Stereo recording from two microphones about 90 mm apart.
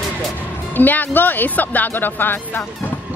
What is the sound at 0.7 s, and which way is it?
Speech, 20° left (ahead or behind).